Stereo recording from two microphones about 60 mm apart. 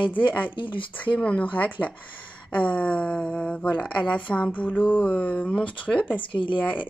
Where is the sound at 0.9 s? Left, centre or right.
Left.